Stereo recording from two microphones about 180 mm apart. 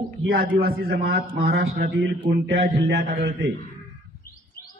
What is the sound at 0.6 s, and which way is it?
A man's voice, 55° right (ahead or behind).